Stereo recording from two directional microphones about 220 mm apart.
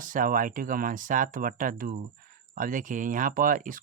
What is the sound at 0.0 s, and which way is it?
Speech, 40° right (ahead or behind).